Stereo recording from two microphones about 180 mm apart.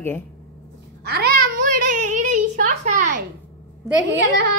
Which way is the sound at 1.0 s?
65° right (ahead or behind).